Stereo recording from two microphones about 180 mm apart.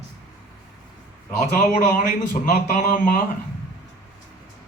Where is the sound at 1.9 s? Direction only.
45° left (ahead or behind).